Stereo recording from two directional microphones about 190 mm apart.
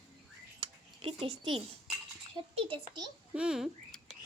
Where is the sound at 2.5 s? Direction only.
30° right (ahead or behind).